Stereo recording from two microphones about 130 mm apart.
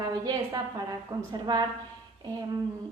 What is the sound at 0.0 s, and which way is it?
A woman's voice, 30° right (ahead or behind).